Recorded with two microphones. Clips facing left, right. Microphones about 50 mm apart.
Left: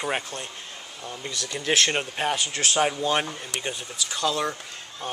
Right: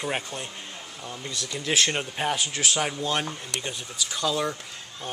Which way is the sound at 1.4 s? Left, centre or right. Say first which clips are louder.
Left 3 dB; left.